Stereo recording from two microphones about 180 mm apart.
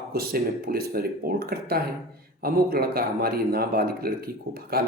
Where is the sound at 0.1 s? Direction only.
60° right (ahead or behind).